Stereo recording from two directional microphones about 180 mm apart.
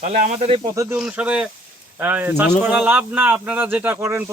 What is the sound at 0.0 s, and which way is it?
Speech, 40° right (ahead or behind).